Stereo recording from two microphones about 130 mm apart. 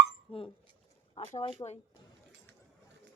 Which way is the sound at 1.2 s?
70° left (ahead or behind).